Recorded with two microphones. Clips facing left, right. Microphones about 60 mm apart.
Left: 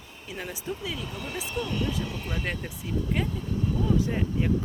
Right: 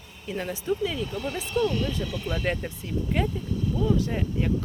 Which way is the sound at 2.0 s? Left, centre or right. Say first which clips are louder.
Right 3 dB; left.